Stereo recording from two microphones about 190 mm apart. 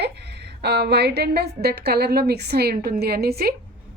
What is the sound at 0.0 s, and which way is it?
A woman's voice, 60° right (ahead or behind).